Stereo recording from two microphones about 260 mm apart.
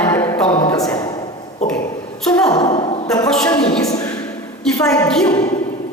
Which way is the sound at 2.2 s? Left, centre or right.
Centre.